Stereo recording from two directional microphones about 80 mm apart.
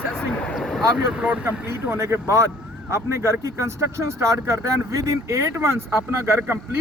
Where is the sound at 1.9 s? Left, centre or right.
Right.